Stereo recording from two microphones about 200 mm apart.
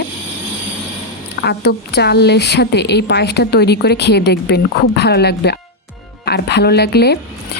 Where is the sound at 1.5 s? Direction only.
55° left (ahead or behind).